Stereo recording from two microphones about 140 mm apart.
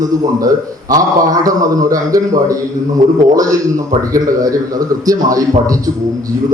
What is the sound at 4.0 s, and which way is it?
A man's voice, 25° right (ahead or behind).